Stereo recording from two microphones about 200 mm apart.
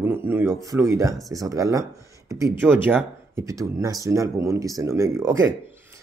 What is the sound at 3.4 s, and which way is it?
Speech, 15° right (ahead or behind).